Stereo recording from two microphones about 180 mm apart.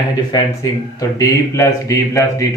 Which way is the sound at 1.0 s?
20° left (ahead or behind).